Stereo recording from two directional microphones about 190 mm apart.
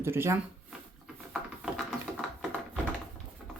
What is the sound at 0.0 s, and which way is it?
Speech, 10° right (ahead or behind).